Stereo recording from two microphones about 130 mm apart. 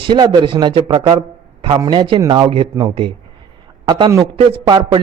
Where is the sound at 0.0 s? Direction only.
35° right (ahead or behind).